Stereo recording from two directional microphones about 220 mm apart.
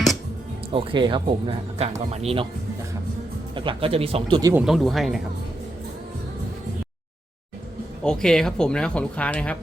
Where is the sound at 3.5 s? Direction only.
25° right (ahead or behind).